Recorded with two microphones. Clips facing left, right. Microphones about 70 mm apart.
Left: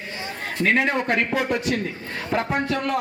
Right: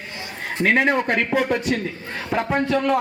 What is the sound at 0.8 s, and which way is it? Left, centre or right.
Speech, right.